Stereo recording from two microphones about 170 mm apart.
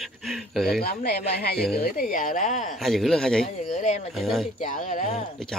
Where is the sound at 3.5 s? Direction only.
45° left (ahead or behind).